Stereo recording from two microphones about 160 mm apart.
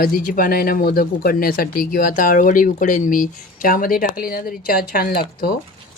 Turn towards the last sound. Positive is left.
turn(degrees=65)  # may be behind; listen again after turning